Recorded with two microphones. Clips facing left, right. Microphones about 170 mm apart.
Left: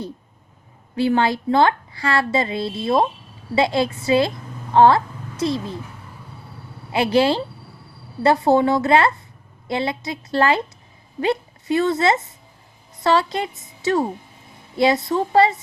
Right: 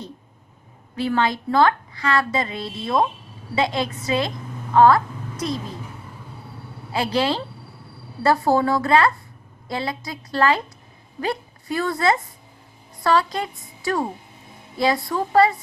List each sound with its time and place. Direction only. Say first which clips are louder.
0.9 s a woman's voice: left 3 dB; 30° left (ahead or behind)
6.9 s a woman's voice: left 5 dB; 25° left (ahead or behind)